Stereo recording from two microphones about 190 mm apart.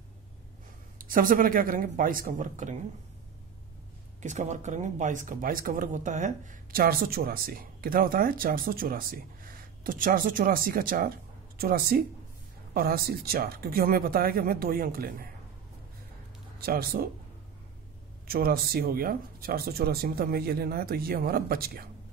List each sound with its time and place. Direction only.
0.9 s speech: 45° right (ahead or behind)
4.2 s speech: 40° right (ahead or behind)
16.5 s speech: 50° right (ahead or behind)
18.2 s speech: 50° right (ahead or behind)